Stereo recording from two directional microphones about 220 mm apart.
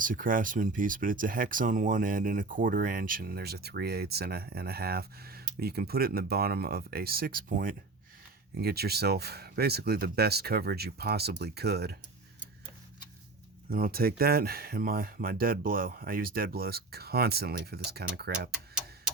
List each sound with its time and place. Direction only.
0.0 s speech: 40° right (ahead or behind)
13.7 s speech: 40° right (ahead or behind)